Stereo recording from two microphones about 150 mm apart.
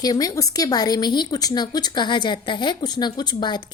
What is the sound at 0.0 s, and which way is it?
Speech, 25° left (ahead or behind).